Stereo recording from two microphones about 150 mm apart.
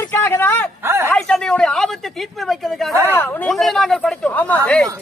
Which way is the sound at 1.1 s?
5° left (ahead or behind).